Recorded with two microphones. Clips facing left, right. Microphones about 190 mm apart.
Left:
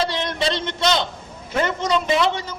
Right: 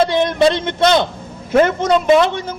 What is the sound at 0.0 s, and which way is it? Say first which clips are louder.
A man's voice: right 9 dB; 55° right (ahead or behind).